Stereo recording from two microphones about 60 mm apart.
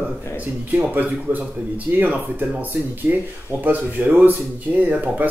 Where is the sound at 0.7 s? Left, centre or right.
Right.